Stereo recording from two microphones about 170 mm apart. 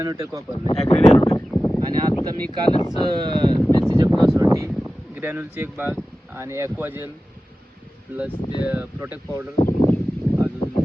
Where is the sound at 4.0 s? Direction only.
20° right (ahead or behind).